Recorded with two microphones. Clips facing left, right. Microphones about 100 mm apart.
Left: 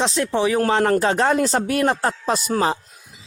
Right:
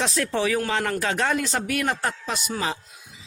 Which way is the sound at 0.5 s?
35° left (ahead or behind).